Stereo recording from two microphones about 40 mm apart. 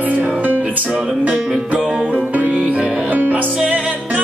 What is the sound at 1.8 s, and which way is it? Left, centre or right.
Music, centre.